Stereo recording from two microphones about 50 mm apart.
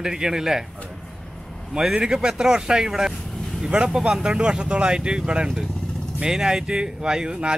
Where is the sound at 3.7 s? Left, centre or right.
Centre.